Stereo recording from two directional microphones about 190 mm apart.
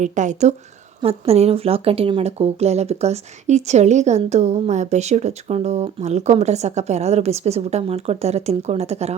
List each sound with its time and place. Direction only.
0.0 s speech: 40° right (ahead or behind)